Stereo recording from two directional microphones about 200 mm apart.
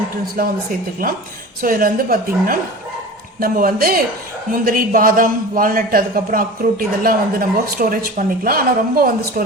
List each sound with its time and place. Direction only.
0.4 s a man's voice: 45° right (ahead or behind)